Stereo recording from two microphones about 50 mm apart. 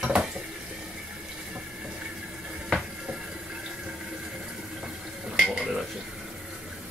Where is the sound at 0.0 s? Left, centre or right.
Centre.